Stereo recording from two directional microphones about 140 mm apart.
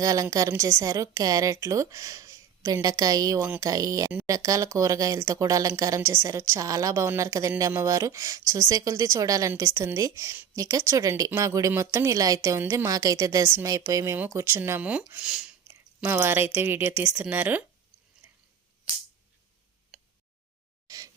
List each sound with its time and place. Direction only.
0.0 s speech: 25° right (ahead or behind)
19.9 s tick-tock: 5° right (ahead or behind)
20.8 s a sound: 25° right (ahead or behind)